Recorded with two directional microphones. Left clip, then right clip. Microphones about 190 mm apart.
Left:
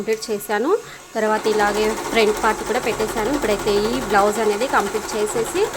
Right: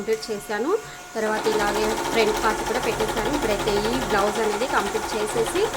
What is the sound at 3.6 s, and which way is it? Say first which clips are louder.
Speech: left 3 dB; 40° left (ahead or behind).